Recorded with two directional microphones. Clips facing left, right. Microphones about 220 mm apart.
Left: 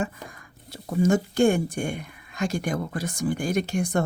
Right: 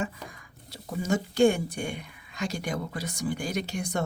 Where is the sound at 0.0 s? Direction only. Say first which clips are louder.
Left 3 dB; 50° left (ahead or behind).